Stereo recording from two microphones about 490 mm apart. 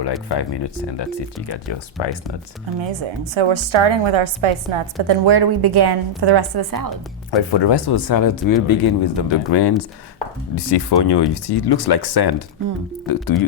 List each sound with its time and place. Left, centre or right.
0.3 s speech: left
3.3 s a woman's voice: right
5.0 s a woman's voice: right
7.3 s speech: left